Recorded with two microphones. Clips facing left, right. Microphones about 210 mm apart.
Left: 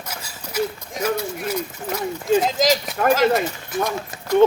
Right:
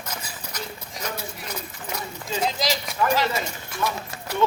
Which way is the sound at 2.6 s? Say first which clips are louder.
Left 6 dB; 45° left (ahead or behind).